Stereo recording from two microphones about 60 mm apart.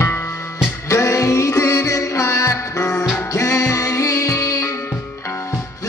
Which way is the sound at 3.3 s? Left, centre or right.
Left.